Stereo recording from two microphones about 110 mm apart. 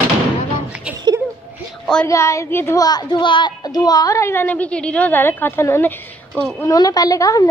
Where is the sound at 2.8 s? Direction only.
40° left (ahead or behind); by 6.4 s 20° left (ahead or behind).